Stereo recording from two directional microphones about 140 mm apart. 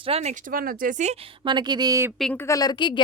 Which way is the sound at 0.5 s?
85° right.